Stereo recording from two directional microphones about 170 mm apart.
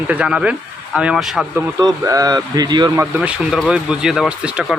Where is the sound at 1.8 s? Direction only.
20° right (ahead or behind).